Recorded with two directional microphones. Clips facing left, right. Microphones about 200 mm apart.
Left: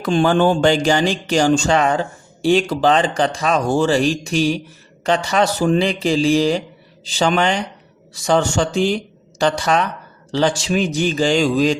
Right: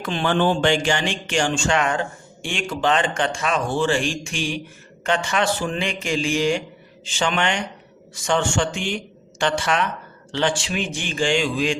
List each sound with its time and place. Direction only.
0.0 s speech: 40° left (ahead or behind)